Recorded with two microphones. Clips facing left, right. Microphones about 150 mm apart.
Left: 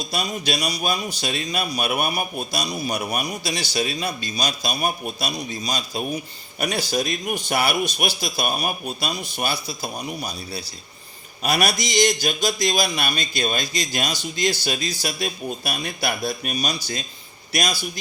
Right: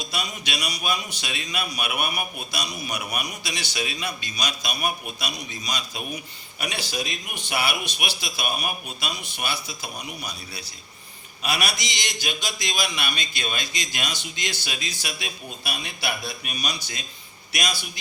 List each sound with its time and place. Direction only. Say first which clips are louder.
0.0 s a man's voice: left 5 dB; 40° left (ahead or behind)
6.6 s a man's voice: left 7 dB; 40° left (ahead or behind)
11.4 s a man's voice: left 6 dB; 45° left (ahead or behind)